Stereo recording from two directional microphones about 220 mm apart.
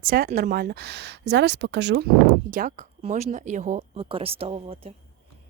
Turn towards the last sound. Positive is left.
turn(degrees=-25)  # may be behind; listen again after turning